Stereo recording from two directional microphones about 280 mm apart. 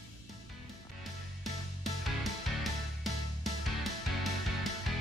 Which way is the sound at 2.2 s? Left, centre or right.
Centre.